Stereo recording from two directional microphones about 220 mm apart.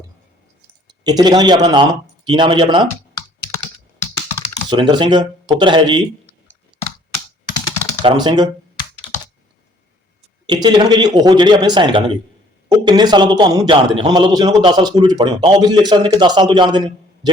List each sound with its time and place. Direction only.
0.9 s speech: 20° right (ahead or behind)
4.7 s speech: 20° right (ahead or behind)
8.0 s speech: 20° right (ahead or behind)
10.4 s speech: 20° right (ahead or behind)